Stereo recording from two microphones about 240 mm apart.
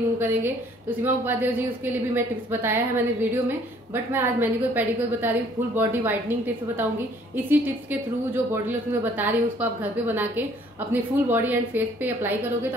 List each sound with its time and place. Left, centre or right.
0.2 s a woman's voice: centre